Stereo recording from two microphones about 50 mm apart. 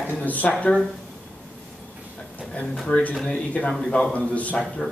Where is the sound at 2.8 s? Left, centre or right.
Left.